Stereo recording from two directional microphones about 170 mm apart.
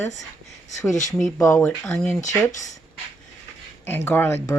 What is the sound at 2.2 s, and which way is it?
Speech, 45° left (ahead or behind).